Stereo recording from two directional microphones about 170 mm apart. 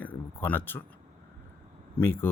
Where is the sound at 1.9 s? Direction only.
10° left (ahead or behind).